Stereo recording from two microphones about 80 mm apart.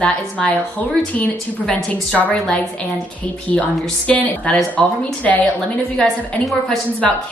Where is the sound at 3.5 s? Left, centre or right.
Centre.